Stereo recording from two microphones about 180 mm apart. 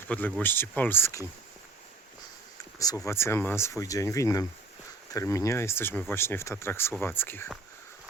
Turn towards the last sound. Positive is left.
turn(degrees=10)  # may be behind; listen again after turning